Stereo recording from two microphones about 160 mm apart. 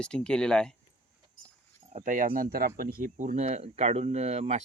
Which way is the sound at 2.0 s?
55° right (ahead or behind).